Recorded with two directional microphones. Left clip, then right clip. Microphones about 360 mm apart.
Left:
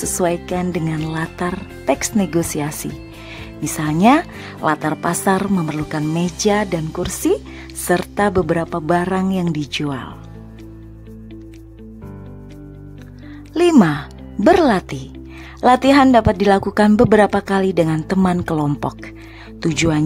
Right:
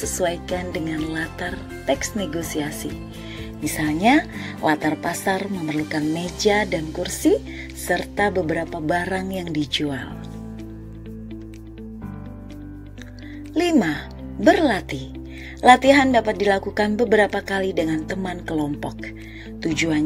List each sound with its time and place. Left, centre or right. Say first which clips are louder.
0.0 s a woman's voice: left 4 dB; centre
13.6 s a woman's voice: left 6 dB; centre